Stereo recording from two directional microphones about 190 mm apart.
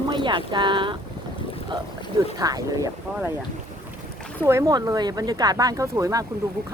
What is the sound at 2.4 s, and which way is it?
Speech, 20° right (ahead or behind).